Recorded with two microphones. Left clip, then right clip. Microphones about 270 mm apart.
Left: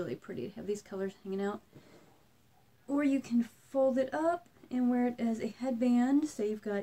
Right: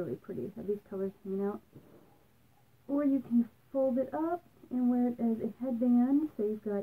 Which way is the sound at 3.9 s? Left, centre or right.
Centre.